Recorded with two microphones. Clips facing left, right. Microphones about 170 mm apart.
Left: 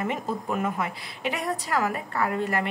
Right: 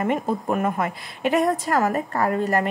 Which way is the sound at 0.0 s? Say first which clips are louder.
Right 6 dB; 50° right (ahead or behind).